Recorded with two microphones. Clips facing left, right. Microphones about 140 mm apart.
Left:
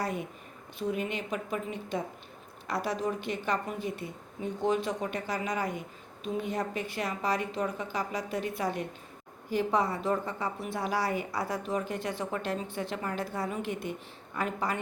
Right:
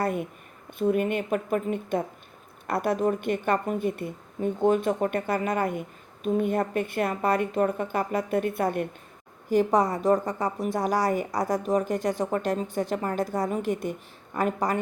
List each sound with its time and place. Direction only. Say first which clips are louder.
0.0 s a woman's voice: right 6 dB; 55° right (ahead or behind)
9.5 s a woman's voice: right 6 dB; 45° right (ahead or behind)